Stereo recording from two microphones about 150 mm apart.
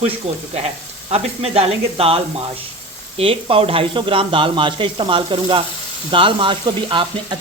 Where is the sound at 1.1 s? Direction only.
45° right (ahead or behind).